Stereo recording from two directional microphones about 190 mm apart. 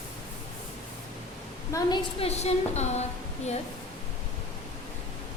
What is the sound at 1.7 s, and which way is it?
A woman's voice, 25° left (ahead or behind).